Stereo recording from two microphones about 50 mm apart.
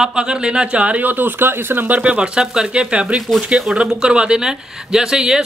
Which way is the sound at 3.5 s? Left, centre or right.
Centre.